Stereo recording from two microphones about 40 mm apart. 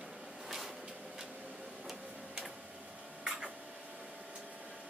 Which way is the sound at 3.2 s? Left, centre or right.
Centre.